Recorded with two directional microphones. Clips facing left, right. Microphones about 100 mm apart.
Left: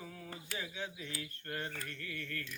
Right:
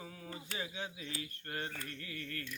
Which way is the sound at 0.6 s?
30° right (ahead or behind).